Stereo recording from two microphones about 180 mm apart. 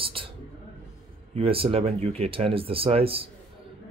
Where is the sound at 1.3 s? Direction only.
30° right (ahead or behind).